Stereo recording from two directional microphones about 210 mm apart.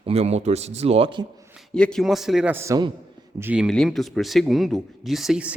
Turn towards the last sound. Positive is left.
turn(degrees=-5)  # may be behind; listen again after turning